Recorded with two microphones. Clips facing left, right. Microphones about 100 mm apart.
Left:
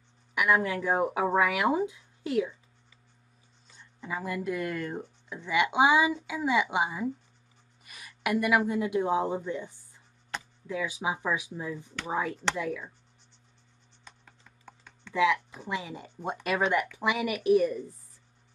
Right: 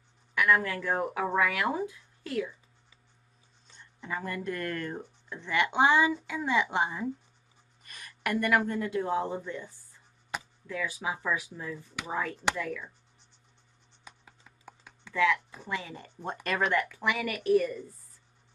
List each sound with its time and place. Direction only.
0.3 s speech: 15° left (ahead or behind)
3.7 s speech: 5° left (ahead or behind)
10.3 s a sound: 10° right (ahead or behind)
10.7 s speech: 15° left (ahead or behind)
14.0 s computer keyboard: 10° right (ahead or behind)
15.1 s speech: 15° left (ahead or behind)